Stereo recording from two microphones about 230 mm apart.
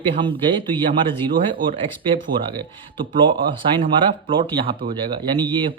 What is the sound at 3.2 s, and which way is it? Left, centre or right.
A man's voice, right.